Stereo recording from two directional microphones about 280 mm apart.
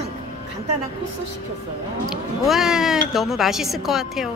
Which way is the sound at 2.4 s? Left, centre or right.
Centre.